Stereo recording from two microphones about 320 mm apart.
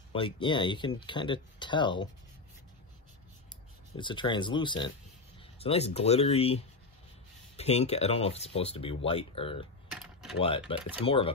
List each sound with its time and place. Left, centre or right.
0.1 s speech: centre
3.9 s speech: centre
10.7 s speech: centre